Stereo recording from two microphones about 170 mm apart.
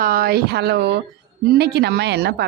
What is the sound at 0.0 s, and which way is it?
Speech, 60° right (ahead or behind).